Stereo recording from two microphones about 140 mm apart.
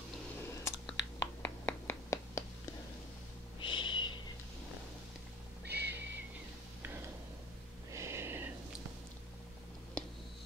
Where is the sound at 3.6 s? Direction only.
35° left (ahead or behind).